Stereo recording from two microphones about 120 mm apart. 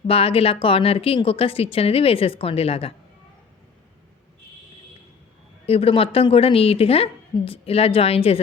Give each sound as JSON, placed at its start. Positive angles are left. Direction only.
{"t": 0.1, "sound": "a woman's voice", "side_deg": 50}
{"t": 5.6, "sound": "a woman's voice", "side_deg": 55}